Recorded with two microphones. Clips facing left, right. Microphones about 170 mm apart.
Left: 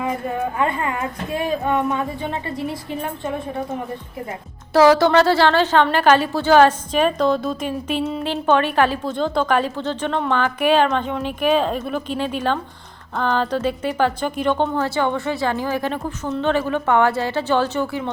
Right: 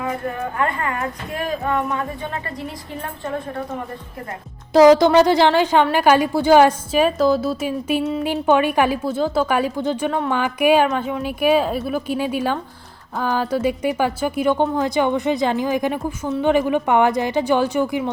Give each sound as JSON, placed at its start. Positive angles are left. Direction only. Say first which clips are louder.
{"t": 0.6, "sound": "a woman's voice", "louder": "right 2 dB", "side_deg": 15}
{"t": 4.7, "sound": "speech", "louder": "right 2 dB", "side_deg": -15}